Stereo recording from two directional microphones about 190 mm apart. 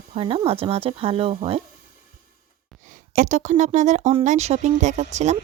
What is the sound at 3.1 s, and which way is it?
Speech, 40° right (ahead or behind).